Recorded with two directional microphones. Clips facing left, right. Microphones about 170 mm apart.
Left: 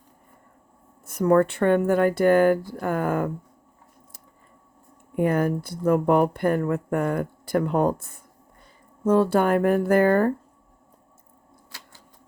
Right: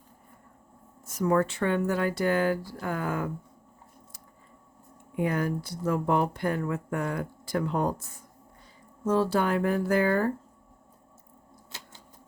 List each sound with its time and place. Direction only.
1.0 s speech: 60° left (ahead or behind)
5.1 s speech: 50° left (ahead or behind)
11.7 s a sound: 25° right (ahead or behind)